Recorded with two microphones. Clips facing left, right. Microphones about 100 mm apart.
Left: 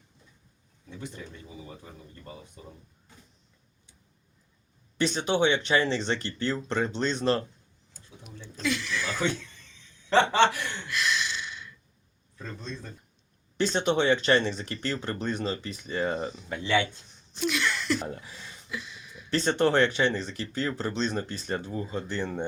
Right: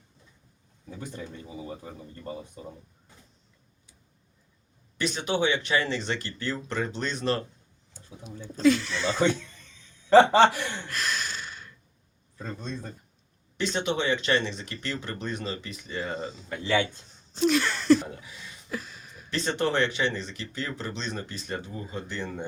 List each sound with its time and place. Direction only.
0.9 s speech: 40° right (ahead or behind)
4.9 s speech: 30° left (ahead or behind)
8.5 s speech: 35° right (ahead or behind)
10.1 s speech: 40° right (ahead or behind)
13.6 s speech: 35° left (ahead or behind)
17.3 s a sound: 35° right (ahead or behind)
18.1 s speech: 35° left (ahead or behind)
18.7 s a sound: 40° right (ahead or behind)
19.3 s speech: 30° left (ahead or behind)